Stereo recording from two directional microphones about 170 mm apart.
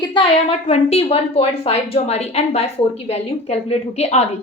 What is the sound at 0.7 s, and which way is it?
A woman's voice, 35° left (ahead or behind).